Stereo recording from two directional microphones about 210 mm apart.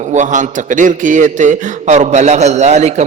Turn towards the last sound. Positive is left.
turn(degrees=-35)  # may be behind; listen again after turning